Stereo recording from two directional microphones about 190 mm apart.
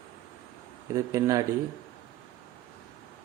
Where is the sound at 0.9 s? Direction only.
15° right (ahead or behind).